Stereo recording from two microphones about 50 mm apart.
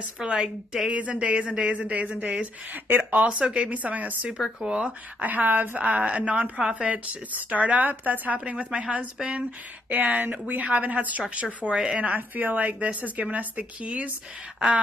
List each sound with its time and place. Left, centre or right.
0.2 s a woman's voice: centre
2.4 s speech: right
3.3 s speech: right
4.6 s speech: centre
5.2 s speech: right